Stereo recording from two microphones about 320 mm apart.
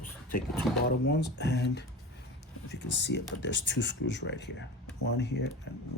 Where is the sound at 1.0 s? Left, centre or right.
Left.